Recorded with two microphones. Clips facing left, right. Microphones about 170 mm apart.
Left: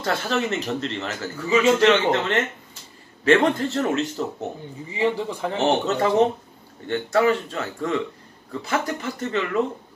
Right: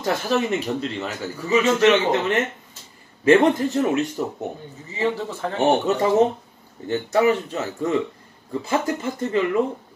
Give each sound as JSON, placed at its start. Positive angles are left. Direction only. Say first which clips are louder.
{"t": 0.0, "sound": "speech", "louder": "right 2 dB", "side_deg": -15}
{"t": 4.9, "sound": "speech", "louder": "left 1 dB", "side_deg": 15}
{"t": 5.6, "sound": "speech", "louder": "right 2 dB", "side_deg": -15}